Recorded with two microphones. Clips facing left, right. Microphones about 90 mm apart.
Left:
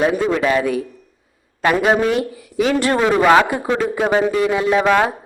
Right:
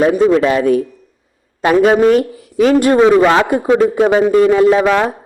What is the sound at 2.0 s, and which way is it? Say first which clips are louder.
Speech: right 8 dB; 45° right (ahead or behind).